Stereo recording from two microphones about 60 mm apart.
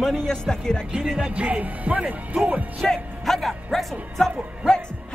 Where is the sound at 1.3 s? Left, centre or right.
Right.